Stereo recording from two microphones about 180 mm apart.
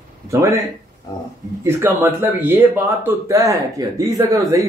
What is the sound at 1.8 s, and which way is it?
A man's voice, 15° right (ahead or behind).